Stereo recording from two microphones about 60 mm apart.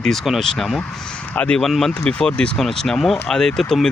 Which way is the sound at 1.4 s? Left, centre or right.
Left.